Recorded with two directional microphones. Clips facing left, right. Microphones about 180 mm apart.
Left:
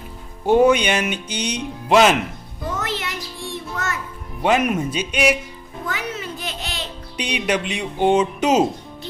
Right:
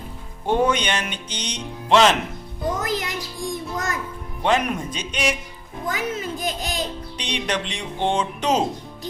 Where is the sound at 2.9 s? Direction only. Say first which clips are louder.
Right 2 dB; 40° right (ahead or behind).